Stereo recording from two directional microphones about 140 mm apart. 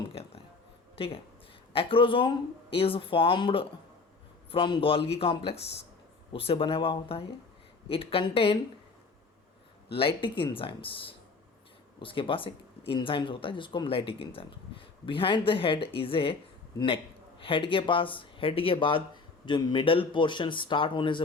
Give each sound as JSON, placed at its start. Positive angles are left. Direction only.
{"t": 0.1, "sound": "a sound", "side_deg": 45}
{"t": 0.9, "sound": "speech", "side_deg": 40}
{"t": 9.9, "sound": "speech", "side_deg": 40}